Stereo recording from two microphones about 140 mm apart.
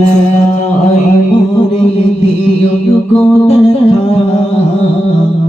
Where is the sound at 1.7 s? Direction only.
45° left (ahead or behind).